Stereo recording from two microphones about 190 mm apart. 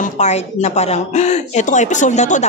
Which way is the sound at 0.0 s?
35° left (ahead or behind).